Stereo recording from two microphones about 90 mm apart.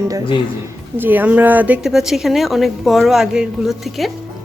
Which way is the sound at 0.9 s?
20° right (ahead or behind).